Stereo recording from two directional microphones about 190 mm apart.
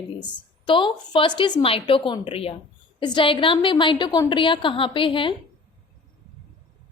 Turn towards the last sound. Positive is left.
turn(degrees=25)  # may be behind; listen again after turning